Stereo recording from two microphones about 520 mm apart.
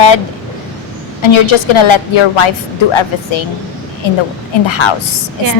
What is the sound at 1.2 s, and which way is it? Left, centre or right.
A woman's voice, left.